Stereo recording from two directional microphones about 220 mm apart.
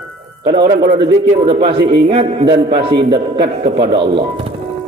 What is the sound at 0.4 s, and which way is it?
A man's voice, 20° right (ahead or behind).